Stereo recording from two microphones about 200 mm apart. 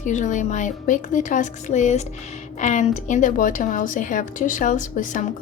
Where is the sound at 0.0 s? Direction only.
35° left (ahead or behind).